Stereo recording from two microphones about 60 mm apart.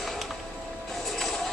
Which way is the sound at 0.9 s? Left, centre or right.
Centre.